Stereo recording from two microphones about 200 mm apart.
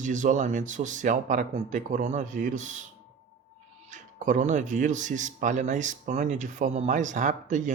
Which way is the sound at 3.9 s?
40° right (ahead or behind).